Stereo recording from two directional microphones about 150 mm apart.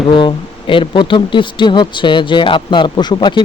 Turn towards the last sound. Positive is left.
turn(degrees=30)  # may be behind; listen again after turning